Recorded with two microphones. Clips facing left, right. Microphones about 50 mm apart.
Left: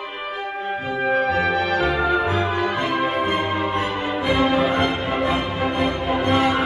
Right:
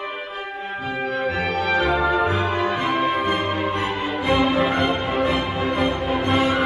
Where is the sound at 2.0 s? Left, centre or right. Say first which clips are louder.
Even; centre.